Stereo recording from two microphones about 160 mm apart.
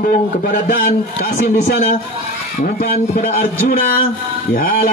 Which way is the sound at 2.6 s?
75° left (ahead or behind).